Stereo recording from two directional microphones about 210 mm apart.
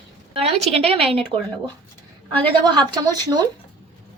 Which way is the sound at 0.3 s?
30° right (ahead or behind).